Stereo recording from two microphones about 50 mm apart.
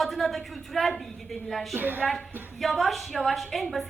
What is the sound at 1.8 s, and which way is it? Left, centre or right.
Speech, right.